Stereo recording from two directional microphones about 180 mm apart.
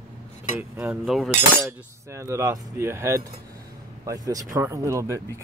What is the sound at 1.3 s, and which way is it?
Speech, 10° right (ahead or behind).